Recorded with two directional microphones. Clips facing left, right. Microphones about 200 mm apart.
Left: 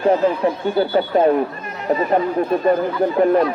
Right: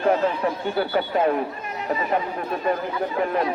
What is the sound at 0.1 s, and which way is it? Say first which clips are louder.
Speech: left 4 dB; 30° left (ahead or behind).